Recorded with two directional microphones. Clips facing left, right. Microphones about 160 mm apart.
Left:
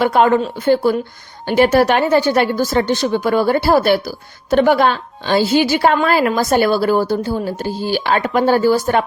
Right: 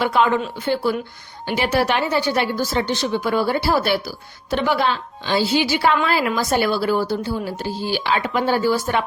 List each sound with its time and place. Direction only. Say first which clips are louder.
0.0 s a woman's voice: left 5 dB; 45° left (ahead or behind)